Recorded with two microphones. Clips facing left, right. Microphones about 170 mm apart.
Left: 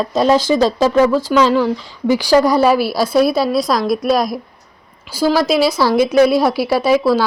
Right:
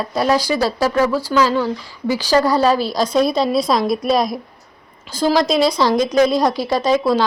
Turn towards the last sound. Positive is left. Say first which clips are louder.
# left 2 dB
turn(degrees=10)  # may be behind; listen again after turning